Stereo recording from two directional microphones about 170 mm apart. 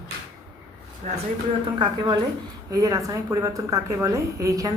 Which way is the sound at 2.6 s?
20° right (ahead or behind).